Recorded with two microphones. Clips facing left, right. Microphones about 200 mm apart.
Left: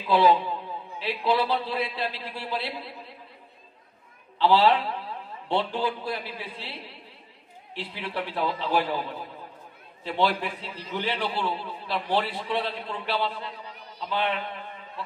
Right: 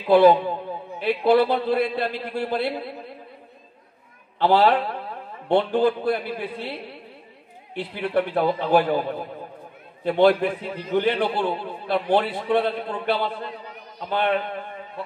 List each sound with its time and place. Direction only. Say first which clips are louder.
0.0 s a man's voice: right 6 dB; 50° right (ahead or behind)
4.4 s a man's voice: right 2 dB; 50° right (ahead or behind)